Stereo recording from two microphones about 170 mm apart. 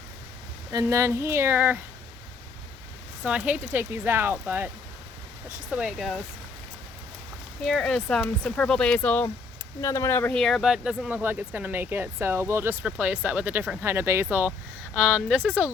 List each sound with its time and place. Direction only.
0.7 s speech: 20° right (ahead or behind)
3.2 s speech: 10° right (ahead or behind)
5.7 s speech: centre (ahead or behind)
7.6 s speech: 5° left (ahead or behind)